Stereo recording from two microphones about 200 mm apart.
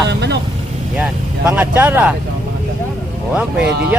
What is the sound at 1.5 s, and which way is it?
Speech, 10° right (ahead or behind).